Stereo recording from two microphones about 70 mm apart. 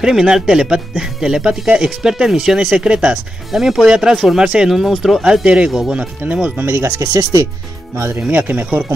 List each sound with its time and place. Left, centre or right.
0.0 s speech: centre
5.9 s speech: centre
6.6 s speech: right
7.1 s speech: right
8.3 s speech: right